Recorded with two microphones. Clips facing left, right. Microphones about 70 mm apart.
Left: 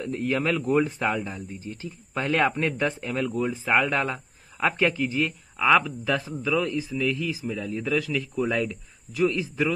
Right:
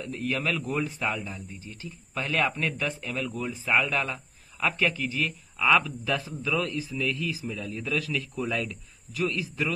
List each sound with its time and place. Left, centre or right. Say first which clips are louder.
0.0 s a man's voice: left 4 dB; left
3.3 s a man's voice: left 6 dB; centre
3.6 s a man's voice: left 1 dB; left
5.6 s a man's voice: left 3 dB; centre